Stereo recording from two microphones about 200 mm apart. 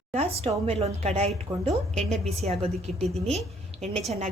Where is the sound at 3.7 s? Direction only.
30° right (ahead or behind).